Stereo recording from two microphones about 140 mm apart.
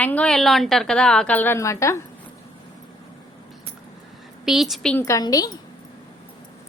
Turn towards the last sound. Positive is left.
turn(degrees=25)  # may be behind; listen again after turning